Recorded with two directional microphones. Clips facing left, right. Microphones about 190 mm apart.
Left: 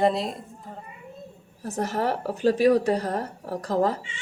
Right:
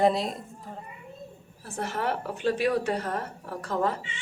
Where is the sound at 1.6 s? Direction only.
40° left (ahead or behind).